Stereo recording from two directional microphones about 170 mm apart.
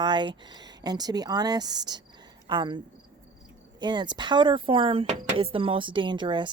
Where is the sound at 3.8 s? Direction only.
25° right (ahead or behind).